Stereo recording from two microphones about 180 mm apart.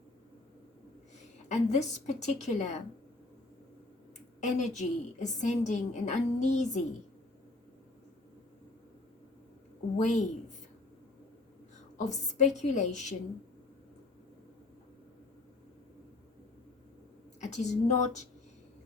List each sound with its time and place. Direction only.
1.5 s a woman's voice: 40° left (ahead or behind)
4.4 s a woman's voice: 40° left (ahead or behind)
10.0 s a woman's voice: 45° left (ahead or behind)
11.9 s a woman's voice: 40° left (ahead or behind)
17.4 s a woman's voice: 40° left (ahead or behind)